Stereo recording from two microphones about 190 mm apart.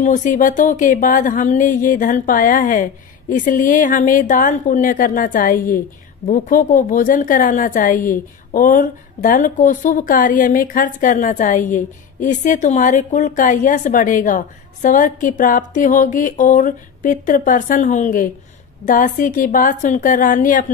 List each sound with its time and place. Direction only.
0.0 s a woman's voice: 40° left (ahead or behind)